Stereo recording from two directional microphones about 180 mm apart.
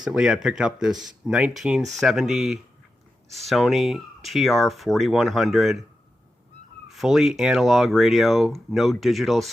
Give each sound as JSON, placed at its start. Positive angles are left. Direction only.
{"t": 0.0, "sound": "speech", "side_deg": -5}
{"t": 6.8, "sound": "speech", "side_deg": 0}